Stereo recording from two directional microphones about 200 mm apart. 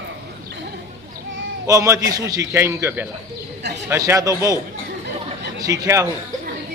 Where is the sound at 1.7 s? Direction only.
15° right (ahead or behind).